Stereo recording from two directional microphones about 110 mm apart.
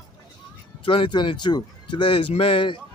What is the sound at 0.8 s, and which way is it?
A man's voice, 50° left (ahead or behind).